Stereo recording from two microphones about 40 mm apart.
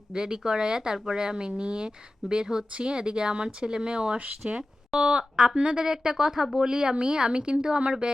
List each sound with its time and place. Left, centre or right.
0.1 s speech: centre
4.2 s speech: right
4.5 s speech: right